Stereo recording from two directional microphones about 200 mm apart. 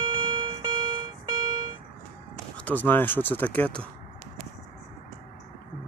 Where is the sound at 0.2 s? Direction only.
25° right (ahead or behind).